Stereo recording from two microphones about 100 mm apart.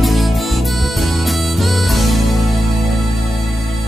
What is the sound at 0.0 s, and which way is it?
Music, centre (ahead or behind).